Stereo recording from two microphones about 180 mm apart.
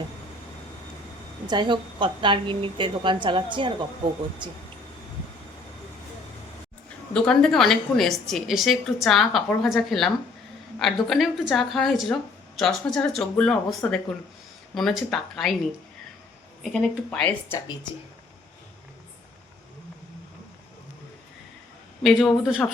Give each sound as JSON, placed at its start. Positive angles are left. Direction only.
{"t": 1.5, "sound": "a woman's voice", "side_deg": -25}
{"t": 7.1, "sound": "a woman's voice", "side_deg": 5}
{"t": 11.1, "sound": "a woman's voice", "side_deg": 0}
{"t": 16.7, "sound": "a woman's voice", "side_deg": 0}
{"t": 22.0, "sound": "a woman's voice", "side_deg": 0}